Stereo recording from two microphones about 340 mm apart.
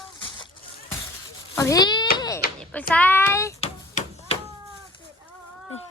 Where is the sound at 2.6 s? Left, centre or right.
Centre.